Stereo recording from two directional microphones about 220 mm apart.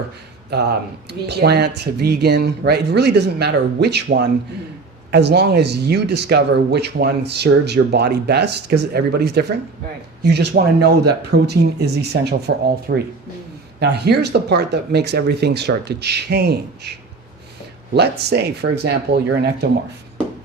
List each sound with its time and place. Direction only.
0.5 s speech: 50° right (ahead or behind)
17.9 s speech: 50° right (ahead or behind)